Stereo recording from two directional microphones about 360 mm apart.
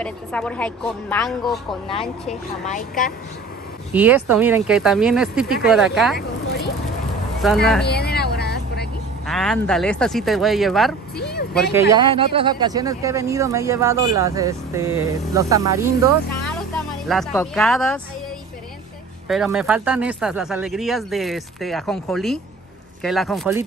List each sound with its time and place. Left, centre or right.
0.0 s speech: centre
2.6 s speech: left
3.9 s speech: centre
6.1 s a sound: left
7.4 s speech: centre
7.8 s vehicle: left
9.2 s speech: centre
11.1 s speech: left
11.5 s a man's voice: centre
17.1 s speech: centre
19.2 s speech: centre